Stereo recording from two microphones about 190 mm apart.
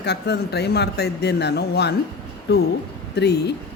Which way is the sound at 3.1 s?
60° left (ahead or behind).